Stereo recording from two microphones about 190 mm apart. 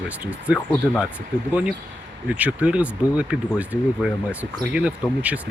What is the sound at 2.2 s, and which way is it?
Speech, 10° right (ahead or behind).